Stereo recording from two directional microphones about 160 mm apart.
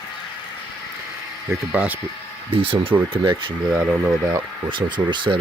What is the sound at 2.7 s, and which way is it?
Speech, 35° right (ahead or behind).